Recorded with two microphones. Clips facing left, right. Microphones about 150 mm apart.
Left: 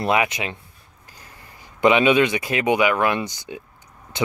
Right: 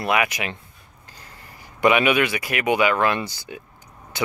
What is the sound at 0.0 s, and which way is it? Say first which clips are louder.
Speech: left 2 dB; 25° left (ahead or behind).